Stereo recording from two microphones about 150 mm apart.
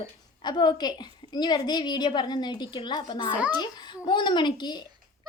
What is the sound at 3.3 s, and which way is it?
Speech, 10° right (ahead or behind).